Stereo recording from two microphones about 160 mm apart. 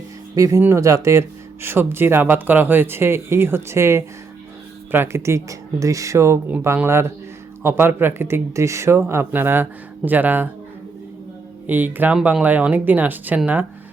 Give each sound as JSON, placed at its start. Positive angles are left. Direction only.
{"t": 0.3, "sound": "speech", "side_deg": -20}
{"t": 11.6, "sound": "speech", "side_deg": -10}